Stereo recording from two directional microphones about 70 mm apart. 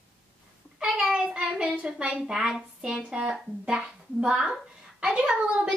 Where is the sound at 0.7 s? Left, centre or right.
Centre.